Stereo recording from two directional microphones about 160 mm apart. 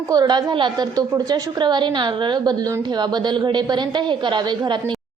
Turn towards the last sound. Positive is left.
turn(degrees=-30)  # may be behind; listen again after turning